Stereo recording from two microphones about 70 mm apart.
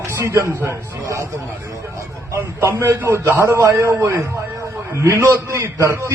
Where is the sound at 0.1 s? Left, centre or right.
Right.